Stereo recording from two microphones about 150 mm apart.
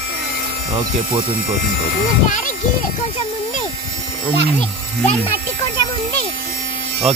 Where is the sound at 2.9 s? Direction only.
55° left (ahead or behind).